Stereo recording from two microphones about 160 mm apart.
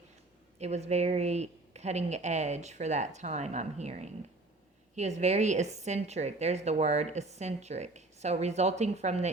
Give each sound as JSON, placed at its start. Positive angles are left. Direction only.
{"t": 0.6, "sound": "a woman's voice", "side_deg": -45}